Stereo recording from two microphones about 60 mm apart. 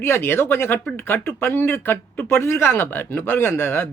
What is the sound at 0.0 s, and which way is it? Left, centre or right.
Speech, left.